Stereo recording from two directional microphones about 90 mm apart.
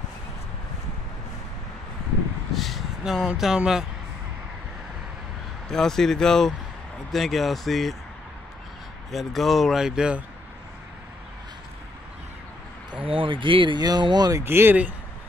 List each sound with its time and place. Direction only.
2.5 s vehicle: centre (ahead or behind)
3.3 s speech: 5° right (ahead or behind)
5.7 s speech: 5° left (ahead or behind)
9.1 s speech: centre (ahead or behind)
12.9 s speech: 75° right (ahead or behind)
13.7 s speech: 50° right (ahead or behind)
14.4 s speech: 25° right (ahead or behind)